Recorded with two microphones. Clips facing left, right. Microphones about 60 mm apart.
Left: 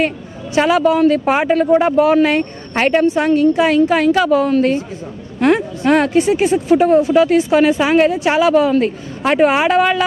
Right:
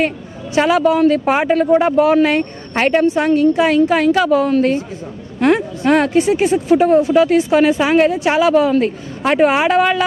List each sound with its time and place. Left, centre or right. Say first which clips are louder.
0.5 s speech: even; left